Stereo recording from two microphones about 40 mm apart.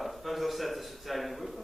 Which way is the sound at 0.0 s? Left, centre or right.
Centre.